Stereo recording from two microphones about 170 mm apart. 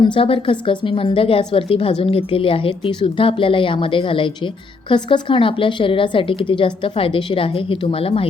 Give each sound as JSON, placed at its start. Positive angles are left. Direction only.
{"t": 0.0, "sound": "a woman's voice", "side_deg": 30}